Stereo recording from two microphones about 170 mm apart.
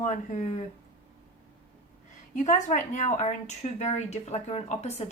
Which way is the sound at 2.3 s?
45° left (ahead or behind).